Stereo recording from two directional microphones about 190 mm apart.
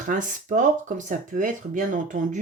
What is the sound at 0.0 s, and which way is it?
Speech, 40° right (ahead or behind).